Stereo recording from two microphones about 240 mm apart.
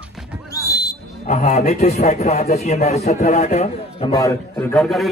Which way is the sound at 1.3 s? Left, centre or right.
Left.